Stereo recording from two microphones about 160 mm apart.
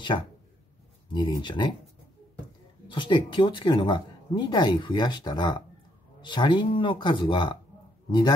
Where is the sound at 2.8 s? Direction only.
30° left (ahead or behind).